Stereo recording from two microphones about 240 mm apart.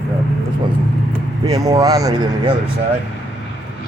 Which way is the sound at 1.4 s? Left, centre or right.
Centre.